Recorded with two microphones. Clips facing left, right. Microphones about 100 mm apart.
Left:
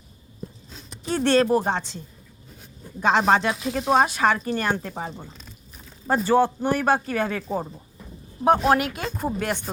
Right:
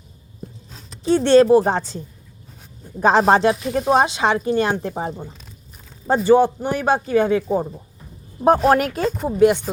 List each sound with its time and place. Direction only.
1.0 s speech: 25° right (ahead or behind)
3.0 s speech: 35° right (ahead or behind); by 4.7 s 15° right (ahead or behind)
4.8 s speech: 25° right (ahead or behind)
6.1 s speech: 15° right (ahead or behind)
8.4 s speech: 40° right (ahead or behind)